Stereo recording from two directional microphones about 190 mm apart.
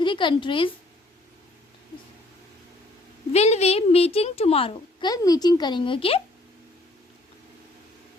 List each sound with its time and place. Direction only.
0.0 s a woman's voice: 25° left (ahead or behind)
3.3 s a child's voice: 35° left (ahead or behind)